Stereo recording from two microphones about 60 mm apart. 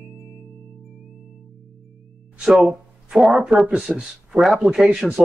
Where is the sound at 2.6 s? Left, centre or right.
Centre.